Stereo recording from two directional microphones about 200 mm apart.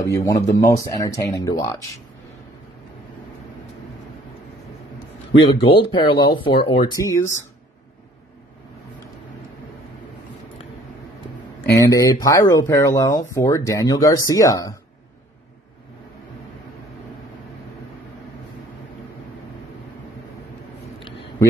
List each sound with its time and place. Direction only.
0.0 s speech: 15° left (ahead or behind)
5.6 s speech: 25° left (ahead or behind)
11.7 s speech: 15° left (ahead or behind)